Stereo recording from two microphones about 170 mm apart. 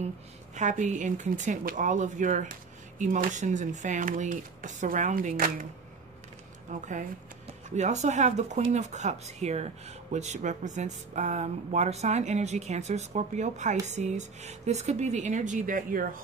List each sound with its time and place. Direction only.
0.6 s speech: 45° right (ahead or behind)
6.7 s speech: 45° right (ahead or behind)